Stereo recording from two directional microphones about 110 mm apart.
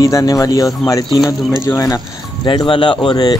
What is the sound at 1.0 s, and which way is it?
Speech, centre (ahead or behind).